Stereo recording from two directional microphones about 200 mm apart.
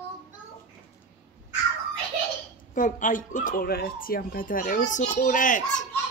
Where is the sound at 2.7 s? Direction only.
40° left (ahead or behind).